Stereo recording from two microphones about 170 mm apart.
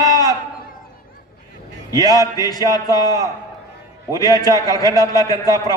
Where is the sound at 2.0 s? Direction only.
20° left (ahead or behind).